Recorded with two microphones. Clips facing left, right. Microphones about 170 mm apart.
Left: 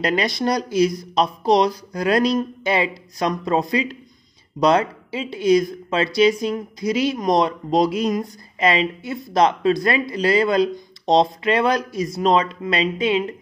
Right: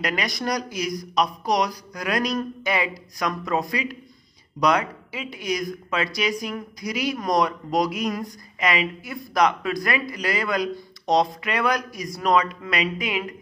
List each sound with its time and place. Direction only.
0.0 s speech: 30° left (ahead or behind)